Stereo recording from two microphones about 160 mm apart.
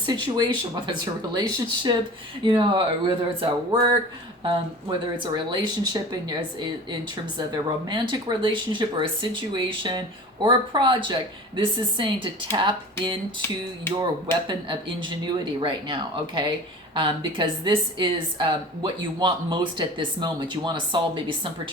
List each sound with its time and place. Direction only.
0.0 s a woman's voice: 25° right (ahead or behind)
7.3 s a woman's voice: 25° right (ahead or behind)